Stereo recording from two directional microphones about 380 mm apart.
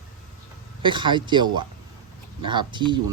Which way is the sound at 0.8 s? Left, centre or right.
Centre.